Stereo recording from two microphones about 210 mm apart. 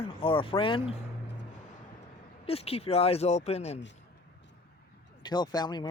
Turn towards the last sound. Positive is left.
turn(degrees=20)  # may be behind; listen again after turning